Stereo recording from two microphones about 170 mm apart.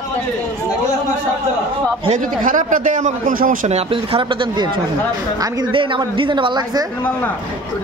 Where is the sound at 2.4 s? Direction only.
50° right (ahead or behind).